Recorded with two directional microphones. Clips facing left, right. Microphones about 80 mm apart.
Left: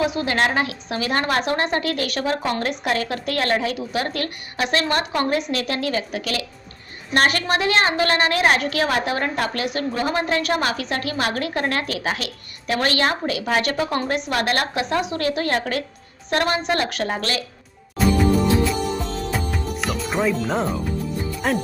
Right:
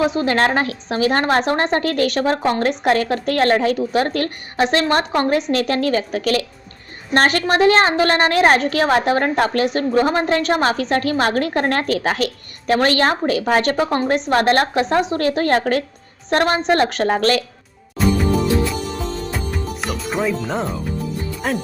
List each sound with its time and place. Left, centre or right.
0.0 s a woman's voice: right
19.5 s speech: centre